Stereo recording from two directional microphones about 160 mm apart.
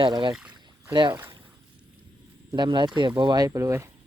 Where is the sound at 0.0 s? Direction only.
30° right (ahead or behind).